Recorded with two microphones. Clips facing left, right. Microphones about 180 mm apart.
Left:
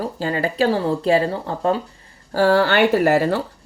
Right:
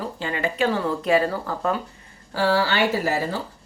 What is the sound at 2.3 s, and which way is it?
Speech, 50° left (ahead or behind).